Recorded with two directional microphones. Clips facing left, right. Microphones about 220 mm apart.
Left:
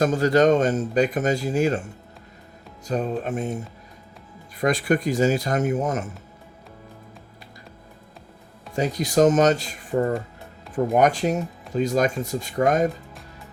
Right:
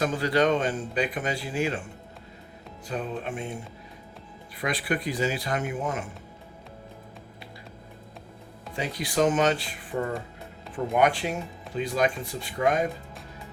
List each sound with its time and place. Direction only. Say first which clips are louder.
0.0 s speech: left 6 dB; 45° left (ahead or behind)
2.8 s speech: left 6 dB; 40° left (ahead or behind)
4.6 s speech: left 7 dB; 45° left (ahead or behind)
8.7 s speech: left 7 dB; 45° left (ahead or behind)